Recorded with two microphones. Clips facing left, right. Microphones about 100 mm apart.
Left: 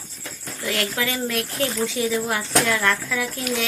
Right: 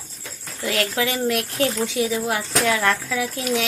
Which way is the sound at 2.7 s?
15° right (ahead or behind).